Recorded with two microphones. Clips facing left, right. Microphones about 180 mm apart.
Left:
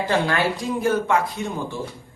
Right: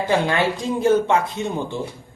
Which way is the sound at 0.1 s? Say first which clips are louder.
Right 2 dB; 20° right (ahead or behind).